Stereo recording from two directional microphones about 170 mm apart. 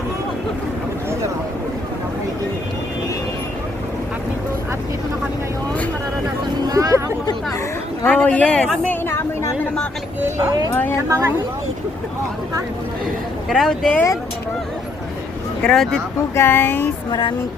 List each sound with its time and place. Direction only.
6.7 s vehicle: 20° right (ahead or behind)
8.0 s speech: 10° left (ahead or behind)
10.2 s speech: 15° right (ahead or behind)
13.5 s speech: centre (ahead or behind)
15.6 s speech: 5° left (ahead or behind)
16.3 s speech: 15° left (ahead or behind)
17.1 s music: 25° left (ahead or behind)